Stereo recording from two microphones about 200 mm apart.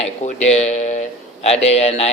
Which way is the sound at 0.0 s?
35° left (ahead or behind).